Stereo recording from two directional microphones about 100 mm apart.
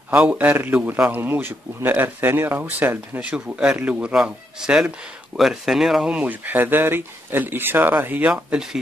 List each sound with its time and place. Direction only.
0.1 s a man's voice: 15° right (ahead or behind)
8.3 s speech: 5° right (ahead or behind)